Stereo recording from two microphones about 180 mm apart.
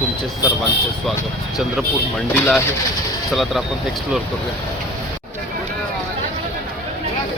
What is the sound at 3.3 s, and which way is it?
Speech, centre (ahead or behind).